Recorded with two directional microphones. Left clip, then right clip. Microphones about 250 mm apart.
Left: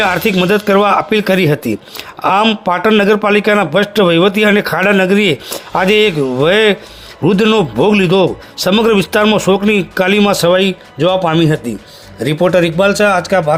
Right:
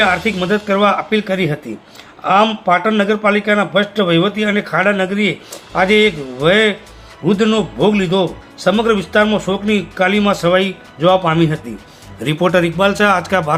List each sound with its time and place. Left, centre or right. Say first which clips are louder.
0.0 s speech: left 2 dB; left; by 13.4 s centre